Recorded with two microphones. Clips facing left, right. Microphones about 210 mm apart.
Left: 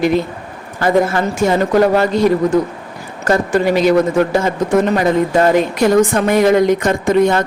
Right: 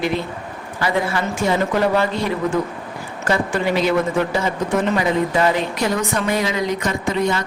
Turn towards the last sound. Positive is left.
turn(degrees=50)  # may be behind; listen again after turning